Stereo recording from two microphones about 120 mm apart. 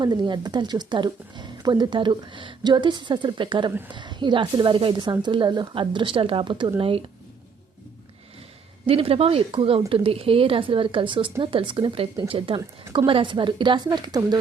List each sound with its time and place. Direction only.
0.0 s speech: 35° right (ahead or behind)
8.9 s speech: 50° right (ahead or behind); by 14.3 s 35° right (ahead or behind)